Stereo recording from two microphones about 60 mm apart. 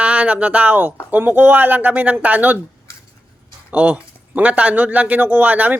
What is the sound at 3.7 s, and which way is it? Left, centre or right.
Speech, right.